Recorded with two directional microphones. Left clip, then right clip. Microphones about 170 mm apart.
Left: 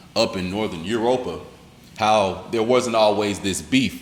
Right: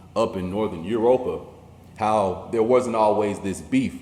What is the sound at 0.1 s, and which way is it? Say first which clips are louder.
A man's voice: left 2 dB; 35° left (ahead or behind).